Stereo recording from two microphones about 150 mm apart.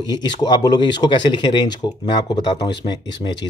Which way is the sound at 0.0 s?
30° left (ahead or behind).